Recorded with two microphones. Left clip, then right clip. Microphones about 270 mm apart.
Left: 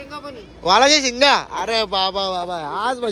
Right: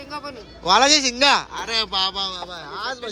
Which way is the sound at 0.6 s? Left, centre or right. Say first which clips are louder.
Left 2 dB; centre.